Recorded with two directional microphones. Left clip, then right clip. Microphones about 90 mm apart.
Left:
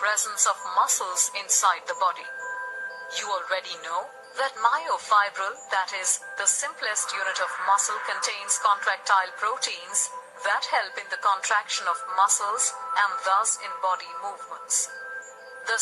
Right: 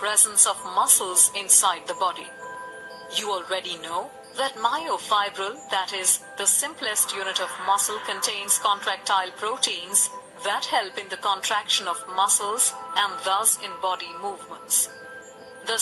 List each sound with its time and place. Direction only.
0.0 s speech: 20° right (ahead or behind)
3.2 s speech: 20° right (ahead or behind)
15.7 s speech: 20° right (ahead or behind)